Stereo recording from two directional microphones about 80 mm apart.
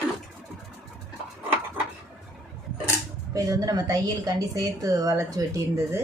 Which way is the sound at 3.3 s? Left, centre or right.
Right.